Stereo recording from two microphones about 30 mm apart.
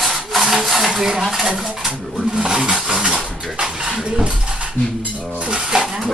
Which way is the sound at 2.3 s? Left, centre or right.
Right.